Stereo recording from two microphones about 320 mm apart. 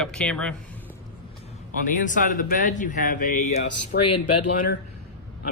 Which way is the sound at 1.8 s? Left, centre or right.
Left.